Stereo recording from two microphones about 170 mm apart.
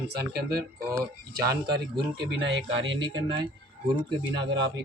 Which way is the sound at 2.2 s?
90° right.